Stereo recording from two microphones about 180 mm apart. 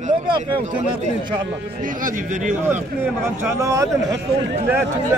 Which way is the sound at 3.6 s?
15° right (ahead or behind).